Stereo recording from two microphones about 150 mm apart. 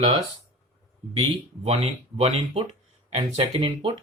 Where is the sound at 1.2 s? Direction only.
45° right (ahead or behind).